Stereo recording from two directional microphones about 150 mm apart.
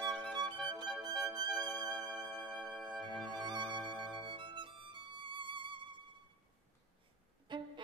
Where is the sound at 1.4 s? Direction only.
90° left.